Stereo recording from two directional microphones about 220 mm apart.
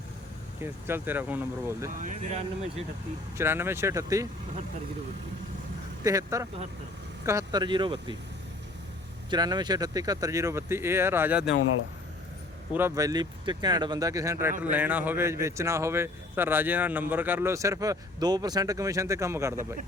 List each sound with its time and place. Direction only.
0.6 s speech: 10° right (ahead or behind)
2.0 s speech: 35° right (ahead or behind)
3.3 s speech: 10° right (ahead or behind)
6.0 s speech: 15° right (ahead or behind)
9.3 s speech: 20° right (ahead or behind)
12.7 s speech: 15° right (ahead or behind)